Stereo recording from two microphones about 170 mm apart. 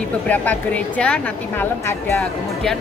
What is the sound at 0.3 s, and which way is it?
Speech, 10° left (ahead or behind).